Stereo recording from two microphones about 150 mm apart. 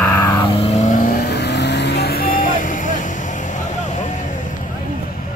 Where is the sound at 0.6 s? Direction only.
50° left (ahead or behind).